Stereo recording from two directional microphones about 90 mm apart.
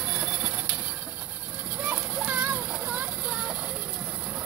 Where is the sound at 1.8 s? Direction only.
20° right (ahead or behind).